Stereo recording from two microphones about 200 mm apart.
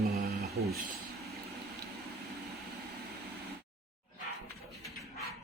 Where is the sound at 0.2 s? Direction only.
50° right (ahead or behind).